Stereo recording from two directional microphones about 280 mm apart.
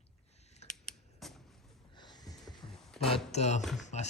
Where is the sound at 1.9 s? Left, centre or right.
Centre.